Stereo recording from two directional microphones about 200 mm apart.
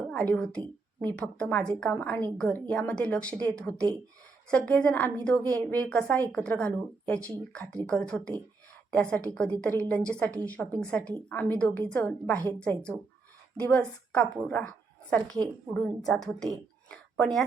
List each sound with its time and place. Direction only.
0.1 s a woman's voice: 5° left (ahead or behind)